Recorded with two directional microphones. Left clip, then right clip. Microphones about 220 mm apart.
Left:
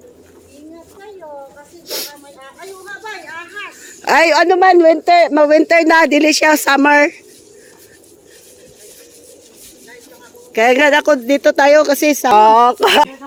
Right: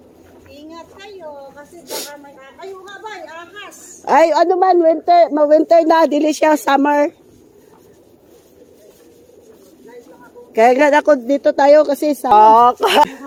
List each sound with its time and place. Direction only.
1.9 s speech: centre (ahead or behind)
4.0 s speech: 10° left (ahead or behind)
10.5 s speech: 10° left (ahead or behind)
12.3 s speech: 30° left (ahead or behind)